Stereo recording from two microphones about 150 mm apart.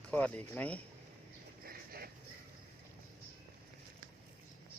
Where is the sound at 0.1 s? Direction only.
10° left (ahead or behind).